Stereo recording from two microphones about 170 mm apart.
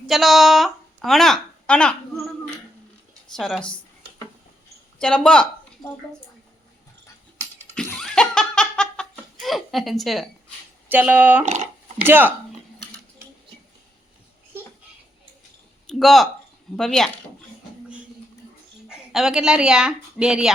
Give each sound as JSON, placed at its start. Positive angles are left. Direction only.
{"t": 0.1, "sound": "a woman's voice", "side_deg": 0}
{"t": 3.3, "sound": "speech", "side_deg": 0}
{"t": 4.9, "sound": "speech", "side_deg": 5}
{"t": 7.8, "sound": "laughter", "side_deg": 5}
{"t": 10.8, "sound": "speech", "side_deg": -10}
{"t": 11.4, "sound": "speech", "side_deg": -45}
{"t": 11.9, "sound": "speech", "side_deg": -10}
{"t": 15.9, "sound": "speech", "side_deg": 0}
{"t": 18.9, "sound": "a woman's voice", "side_deg": -5}